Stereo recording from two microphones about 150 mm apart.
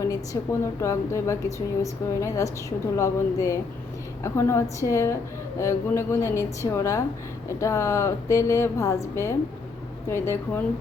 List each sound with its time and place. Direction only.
0.6 s a woman's voice: 20° left (ahead or behind)